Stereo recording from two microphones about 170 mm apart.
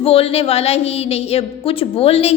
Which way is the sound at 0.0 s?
35° left (ahead or behind).